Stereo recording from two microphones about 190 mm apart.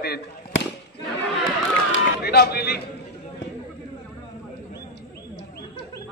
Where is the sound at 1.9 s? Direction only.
55° left (ahead or behind).